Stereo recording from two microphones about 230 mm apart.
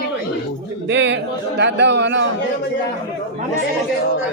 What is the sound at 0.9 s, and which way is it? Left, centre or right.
A man's voice, right.